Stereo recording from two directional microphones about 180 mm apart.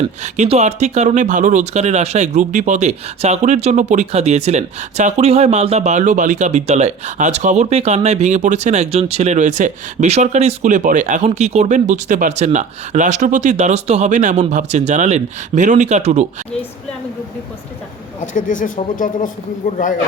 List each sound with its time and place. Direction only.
0.2 s speech: 35° right (ahead or behind)
18.2 s speech: 45° left (ahead or behind)